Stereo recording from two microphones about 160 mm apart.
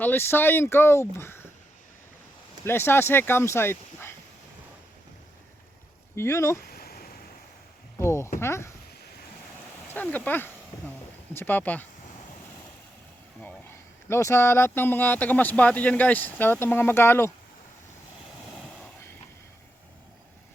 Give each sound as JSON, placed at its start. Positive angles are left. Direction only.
{"t": 0.0, "sound": "speech", "side_deg": 10}
{"t": 2.6, "sound": "speech", "side_deg": 15}
{"t": 6.1, "sound": "speech", "side_deg": 15}
{"t": 6.7, "sound": "a sound", "side_deg": 70}
{"t": 7.9, "sound": "a sound", "side_deg": 15}
{"t": 8.4, "sound": "speech", "side_deg": 15}
{"t": 9.9, "sound": "speech", "side_deg": 10}
{"t": 13.4, "sound": "speech", "side_deg": 15}